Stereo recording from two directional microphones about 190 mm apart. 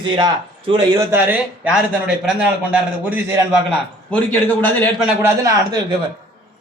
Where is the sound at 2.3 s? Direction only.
5° right (ahead or behind).